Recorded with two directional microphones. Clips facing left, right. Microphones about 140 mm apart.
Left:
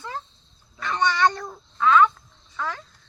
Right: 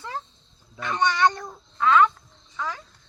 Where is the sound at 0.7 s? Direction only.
20° right (ahead or behind).